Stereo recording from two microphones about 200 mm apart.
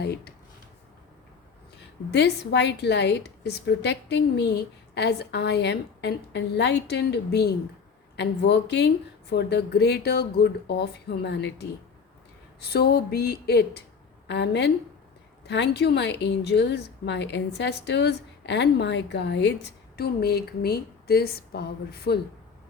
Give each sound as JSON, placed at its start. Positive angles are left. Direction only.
{"t": 0.0, "sound": "a woman's voice", "side_deg": 55}
{"t": 2.0, "sound": "a woman's voice", "side_deg": 55}